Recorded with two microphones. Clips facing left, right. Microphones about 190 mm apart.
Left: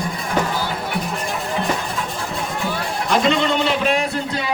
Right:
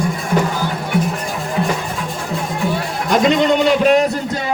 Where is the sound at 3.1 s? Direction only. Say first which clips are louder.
Right 5 dB; 45° right (ahead or behind).